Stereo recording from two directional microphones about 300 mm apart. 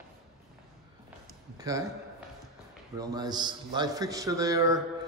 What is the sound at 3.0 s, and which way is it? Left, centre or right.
A man's voice, centre.